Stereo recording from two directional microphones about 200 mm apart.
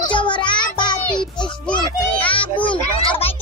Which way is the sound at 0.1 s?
25° left (ahead or behind).